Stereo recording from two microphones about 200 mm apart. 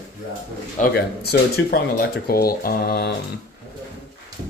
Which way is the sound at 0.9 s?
50° left (ahead or behind).